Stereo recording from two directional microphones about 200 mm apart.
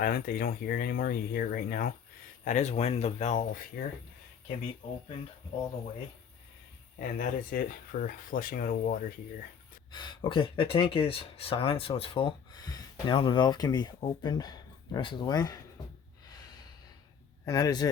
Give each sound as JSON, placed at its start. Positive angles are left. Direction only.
{"t": 0.0, "sound": "speech", "side_deg": 45}
{"t": 2.4, "sound": "speech", "side_deg": 35}
{"t": 7.0, "sound": "speech", "side_deg": 45}
{"t": 9.9, "sound": "speech", "side_deg": 25}
{"t": 17.4, "sound": "speech", "side_deg": 20}